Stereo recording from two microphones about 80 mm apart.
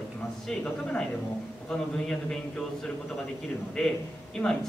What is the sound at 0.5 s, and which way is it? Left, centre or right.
A man's voice, centre.